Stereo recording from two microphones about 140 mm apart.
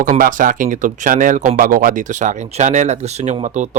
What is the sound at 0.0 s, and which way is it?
Speech, 75° right (ahead or behind).